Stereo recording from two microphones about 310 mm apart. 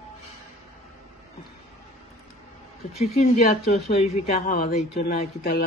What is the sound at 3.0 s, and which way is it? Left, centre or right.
Speech, left.